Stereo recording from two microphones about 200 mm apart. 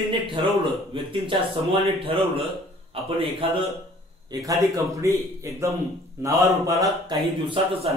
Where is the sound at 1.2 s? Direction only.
30° right (ahead or behind).